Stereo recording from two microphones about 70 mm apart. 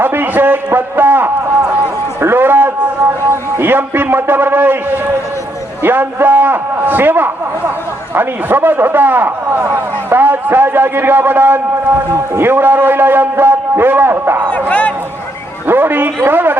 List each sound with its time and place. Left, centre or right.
0.0 s a sound: right
5.8 s a man's voice: right
14.5 s speech: centre
15.6 s a man's voice: right